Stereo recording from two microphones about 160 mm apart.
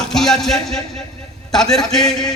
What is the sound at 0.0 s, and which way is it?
A man's voice, 5° left (ahead or behind).